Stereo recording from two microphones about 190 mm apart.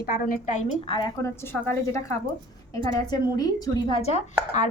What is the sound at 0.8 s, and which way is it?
Speech, 25° left (ahead or behind).